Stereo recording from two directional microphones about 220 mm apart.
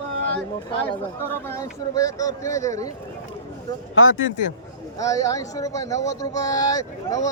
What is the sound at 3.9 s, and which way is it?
Speech, 65° left (ahead or behind).